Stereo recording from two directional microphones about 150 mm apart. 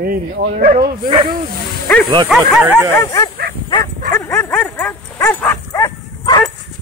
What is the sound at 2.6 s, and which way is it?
Speech, 15° right (ahead or behind).